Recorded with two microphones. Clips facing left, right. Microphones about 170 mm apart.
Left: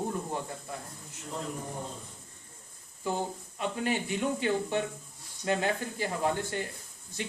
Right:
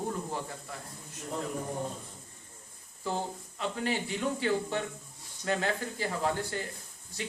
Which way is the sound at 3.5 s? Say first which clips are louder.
Left 1 dB; 20° left (ahead or behind).